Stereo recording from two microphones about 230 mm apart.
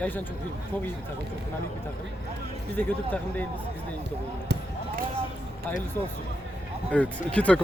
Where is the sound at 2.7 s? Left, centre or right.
Centre.